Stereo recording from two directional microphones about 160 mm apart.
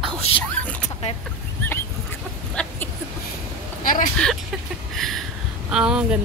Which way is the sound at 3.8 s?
60° left (ahead or behind).